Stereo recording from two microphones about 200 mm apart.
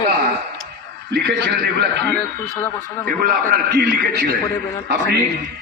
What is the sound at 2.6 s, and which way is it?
Speech, 10° left (ahead or behind).